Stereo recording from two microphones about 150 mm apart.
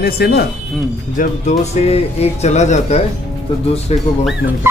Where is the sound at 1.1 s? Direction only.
65° left (ahead or behind).